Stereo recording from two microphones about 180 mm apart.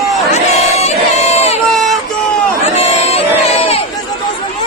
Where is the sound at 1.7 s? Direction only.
Centre (ahead or behind).